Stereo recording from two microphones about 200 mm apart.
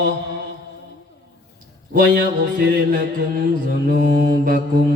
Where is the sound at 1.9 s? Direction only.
45° right (ahead or behind).